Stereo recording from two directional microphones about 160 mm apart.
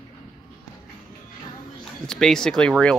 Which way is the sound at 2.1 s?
5° left (ahead or behind).